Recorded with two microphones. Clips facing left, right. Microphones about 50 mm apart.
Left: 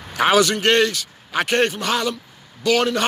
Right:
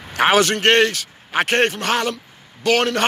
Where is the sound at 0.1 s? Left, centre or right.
Right.